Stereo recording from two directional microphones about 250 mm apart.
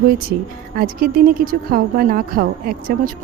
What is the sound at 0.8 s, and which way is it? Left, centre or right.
Speech, right.